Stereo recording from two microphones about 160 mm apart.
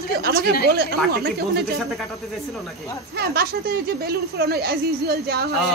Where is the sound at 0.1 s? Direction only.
75° right (ahead or behind).